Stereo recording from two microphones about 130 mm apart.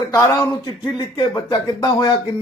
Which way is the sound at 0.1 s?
20° left (ahead or behind).